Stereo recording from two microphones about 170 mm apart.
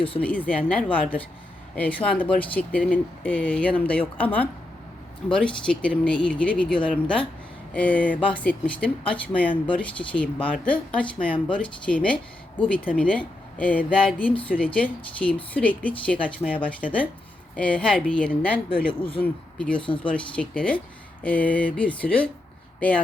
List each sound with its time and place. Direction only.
0.2 s speech: 10° left (ahead or behind)
18.9 s speech: 30° left (ahead or behind)
19.2 s speech: 5° left (ahead or behind)